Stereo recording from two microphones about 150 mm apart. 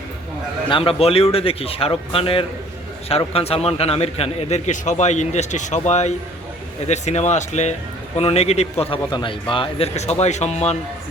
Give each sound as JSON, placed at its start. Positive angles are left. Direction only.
{"t": 0.7, "sound": "a man's voice", "side_deg": 35}